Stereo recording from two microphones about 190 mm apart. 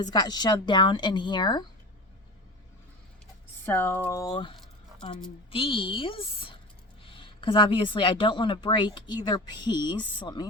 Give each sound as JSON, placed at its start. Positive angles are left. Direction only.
{"t": 0.0, "sound": "a woman's voice", "side_deg": 20}
{"t": 3.7, "sound": "a woman's voice", "side_deg": 10}